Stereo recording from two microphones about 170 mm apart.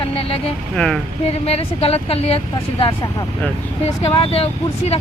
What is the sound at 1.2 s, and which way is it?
Speech, 35° left (ahead or behind).